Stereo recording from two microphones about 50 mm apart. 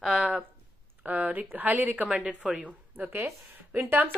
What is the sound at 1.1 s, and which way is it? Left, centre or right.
Speech, right.